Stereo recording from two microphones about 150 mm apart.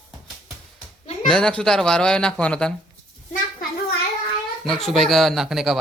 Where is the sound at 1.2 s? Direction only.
5° left (ahead or behind).